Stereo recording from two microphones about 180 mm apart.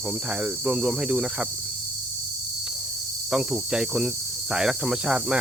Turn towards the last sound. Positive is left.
turn(degrees=-5)  # may be behind; listen again after turning